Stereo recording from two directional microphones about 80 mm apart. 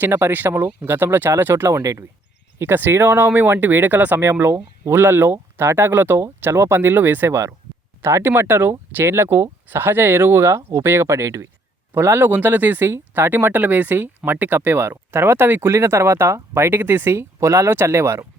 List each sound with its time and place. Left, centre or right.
0.0 s speech: right
1.8 s speech: right
2.6 s speech: right